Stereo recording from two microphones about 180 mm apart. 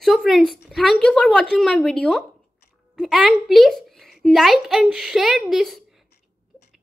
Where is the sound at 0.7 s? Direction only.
5° left (ahead or behind).